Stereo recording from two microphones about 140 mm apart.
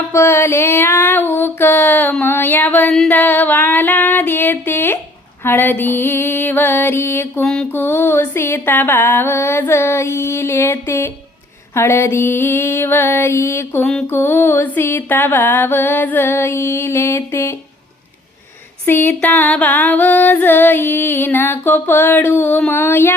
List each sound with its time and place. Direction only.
0.1 s music: 20° left (ahead or behind)
7.4 s music: 5° left (ahead or behind)
18.9 s music: 15° left (ahead or behind)